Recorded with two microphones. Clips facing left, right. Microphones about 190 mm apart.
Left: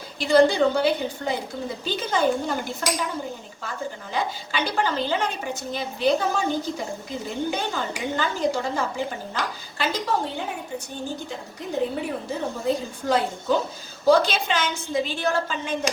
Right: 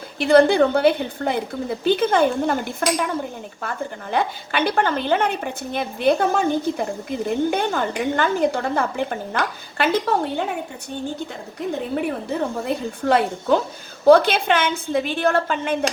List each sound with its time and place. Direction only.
0.2 s a woman's voice: 55° right (ahead or behind)
12.3 s a woman's voice: 60° right (ahead or behind)